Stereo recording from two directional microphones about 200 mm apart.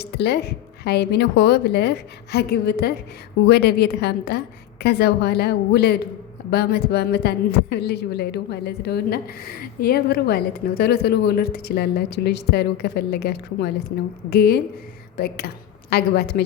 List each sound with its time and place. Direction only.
0.0 s a woman's voice: 55° left (ahead or behind)